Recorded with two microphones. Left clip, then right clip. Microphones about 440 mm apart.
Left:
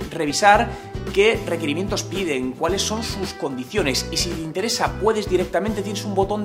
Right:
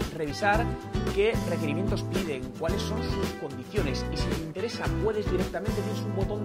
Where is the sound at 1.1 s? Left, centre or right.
Right.